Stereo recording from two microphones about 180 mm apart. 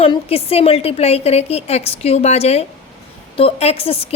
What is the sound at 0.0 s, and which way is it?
A woman's voice, 30° left (ahead or behind).